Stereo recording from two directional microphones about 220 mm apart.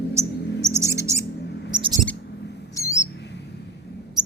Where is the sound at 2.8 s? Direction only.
15° left (ahead or behind).